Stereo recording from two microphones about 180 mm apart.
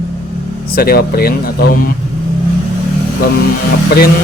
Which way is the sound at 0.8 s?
60° left (ahead or behind).